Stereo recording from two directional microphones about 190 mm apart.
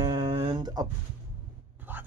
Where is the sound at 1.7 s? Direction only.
10° right (ahead or behind).